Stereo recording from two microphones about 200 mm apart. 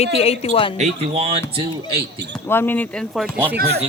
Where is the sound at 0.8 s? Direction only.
30° right (ahead or behind).